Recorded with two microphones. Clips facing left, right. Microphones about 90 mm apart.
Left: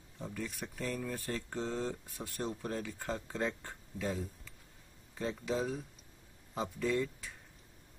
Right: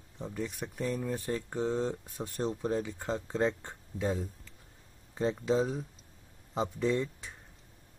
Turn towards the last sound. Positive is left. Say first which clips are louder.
# right 3 dB
turn(degrees=-25)  # may be behind; listen again after turning